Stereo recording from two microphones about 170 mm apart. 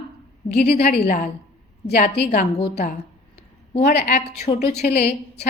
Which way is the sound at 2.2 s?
65° left (ahead or behind).